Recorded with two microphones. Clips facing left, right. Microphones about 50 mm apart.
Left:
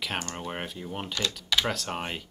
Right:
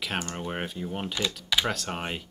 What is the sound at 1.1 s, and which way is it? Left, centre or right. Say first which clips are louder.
Speech: left 1 dB; centre.